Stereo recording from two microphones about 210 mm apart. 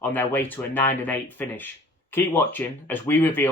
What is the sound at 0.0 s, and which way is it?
Speech, 10° left (ahead or behind).